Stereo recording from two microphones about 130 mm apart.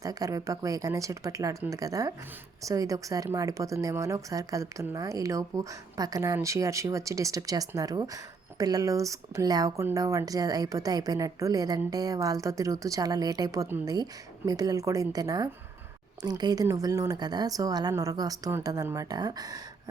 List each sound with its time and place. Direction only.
0.0 s speech: 25° right (ahead or behind)